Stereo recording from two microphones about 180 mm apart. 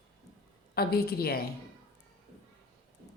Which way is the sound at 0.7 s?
60° left (ahead or behind).